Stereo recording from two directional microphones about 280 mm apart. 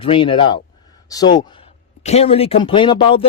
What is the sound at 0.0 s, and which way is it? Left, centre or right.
Speech, centre.